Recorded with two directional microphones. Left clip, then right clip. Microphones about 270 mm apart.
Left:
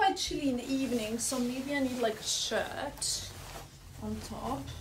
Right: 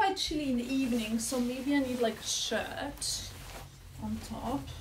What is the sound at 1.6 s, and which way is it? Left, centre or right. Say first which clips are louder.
A woman's voice: right 1 dB; centre.